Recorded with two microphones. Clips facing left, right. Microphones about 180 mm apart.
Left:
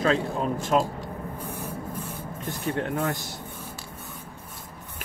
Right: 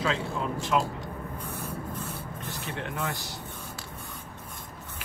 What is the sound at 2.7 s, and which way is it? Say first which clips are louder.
Speech: left 7 dB; 50° left (ahead or behind).